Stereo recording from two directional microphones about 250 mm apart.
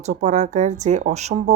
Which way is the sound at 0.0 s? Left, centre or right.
Right.